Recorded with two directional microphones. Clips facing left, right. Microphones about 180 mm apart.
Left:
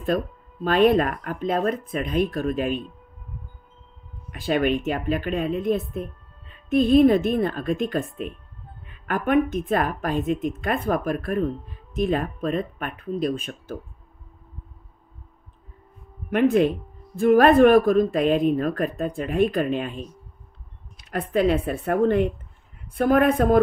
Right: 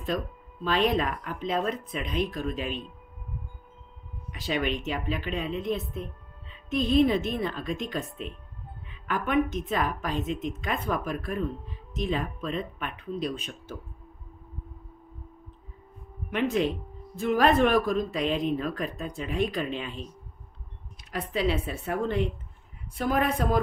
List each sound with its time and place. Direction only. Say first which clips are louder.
0.7 s speech: left 7 dB; 50° left (ahead or behind)
4.3 s a woman's voice: left 7 dB; 55° left (ahead or behind)
16.3 s speech: left 7 dB; 50° left (ahead or behind)
21.1 s speech: left 7 dB; 55° left (ahead or behind)